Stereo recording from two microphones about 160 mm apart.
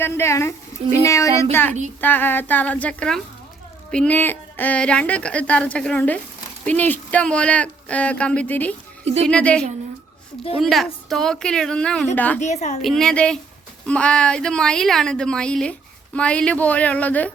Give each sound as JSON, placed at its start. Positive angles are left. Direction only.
{"t": 0.0, "sound": "a woman's voice", "side_deg": 15}
{"t": 12.4, "sound": "a woman's voice", "side_deg": 45}
{"t": 12.8, "sound": "a woman's voice", "side_deg": 0}